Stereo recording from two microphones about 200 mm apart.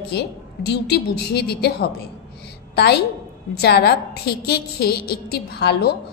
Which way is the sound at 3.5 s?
55° left (ahead or behind).